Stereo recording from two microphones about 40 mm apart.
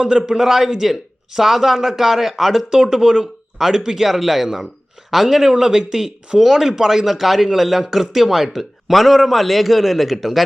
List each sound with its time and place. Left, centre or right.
0.0 s a man's voice: centre
0.3 s speech: centre